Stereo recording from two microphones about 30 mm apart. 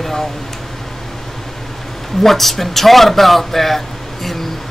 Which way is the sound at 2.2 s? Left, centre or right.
Centre.